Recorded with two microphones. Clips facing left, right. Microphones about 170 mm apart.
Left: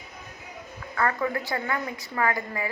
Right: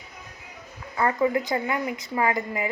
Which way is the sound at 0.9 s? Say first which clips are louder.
Right 4 dB; 20° right (ahead or behind).